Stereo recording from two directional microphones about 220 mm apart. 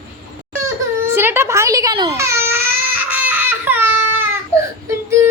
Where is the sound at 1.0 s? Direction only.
10° right (ahead or behind).